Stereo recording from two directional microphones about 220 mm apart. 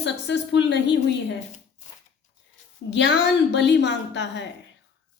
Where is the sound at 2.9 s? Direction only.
50° left (ahead or behind).